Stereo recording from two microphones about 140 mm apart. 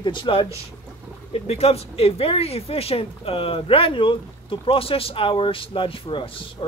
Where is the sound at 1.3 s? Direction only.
45° left (ahead or behind).